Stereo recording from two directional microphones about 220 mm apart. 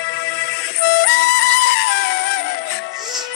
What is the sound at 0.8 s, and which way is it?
Music, 45° left (ahead or behind).